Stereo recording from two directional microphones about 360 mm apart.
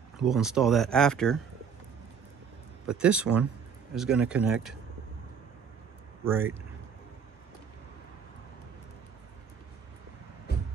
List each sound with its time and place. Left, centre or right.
0.2 s speech: centre
2.9 s speech: centre
6.2 s speech: centre